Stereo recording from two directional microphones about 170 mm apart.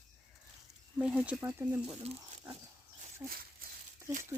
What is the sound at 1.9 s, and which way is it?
Speech, 35° right (ahead or behind).